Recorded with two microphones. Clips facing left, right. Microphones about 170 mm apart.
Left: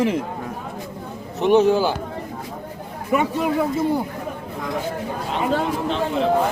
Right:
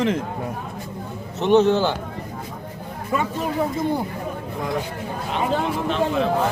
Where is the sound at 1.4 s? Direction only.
10° left (ahead or behind).